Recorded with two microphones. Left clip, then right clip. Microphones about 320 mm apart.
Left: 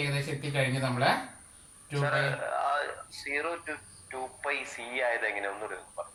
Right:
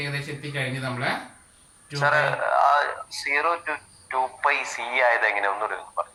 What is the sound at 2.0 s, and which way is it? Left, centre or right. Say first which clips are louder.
Speech: right 9 dB; centre.